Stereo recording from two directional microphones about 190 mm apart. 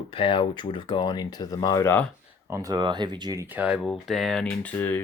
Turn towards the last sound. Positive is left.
turn(degrees=10)  # may be behind; listen again after turning